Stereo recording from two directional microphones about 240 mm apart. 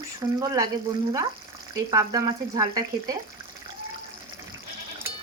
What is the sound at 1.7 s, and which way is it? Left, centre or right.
Speech, centre.